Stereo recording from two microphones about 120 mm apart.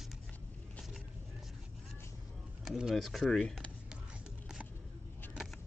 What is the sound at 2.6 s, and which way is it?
Speech, 5° right (ahead or behind).